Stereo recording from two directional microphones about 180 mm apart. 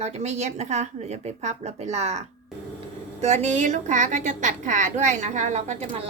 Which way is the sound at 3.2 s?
40° right (ahead or behind).